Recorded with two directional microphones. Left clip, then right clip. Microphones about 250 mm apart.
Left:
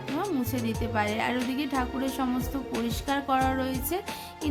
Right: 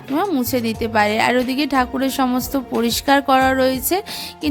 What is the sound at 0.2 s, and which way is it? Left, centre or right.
A woman's voice, right.